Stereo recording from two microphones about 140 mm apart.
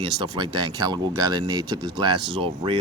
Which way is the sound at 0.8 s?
30° right (ahead or behind).